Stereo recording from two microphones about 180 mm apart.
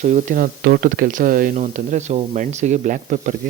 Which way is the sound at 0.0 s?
45° right (ahead or behind).